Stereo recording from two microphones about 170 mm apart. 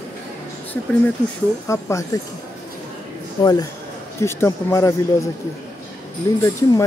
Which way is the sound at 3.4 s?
25° left (ahead or behind).